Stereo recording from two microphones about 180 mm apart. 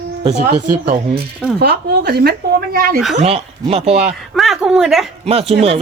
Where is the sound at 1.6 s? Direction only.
65° right (ahead or behind).